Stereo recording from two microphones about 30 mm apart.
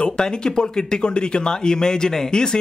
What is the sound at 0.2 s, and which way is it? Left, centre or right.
Speech, left.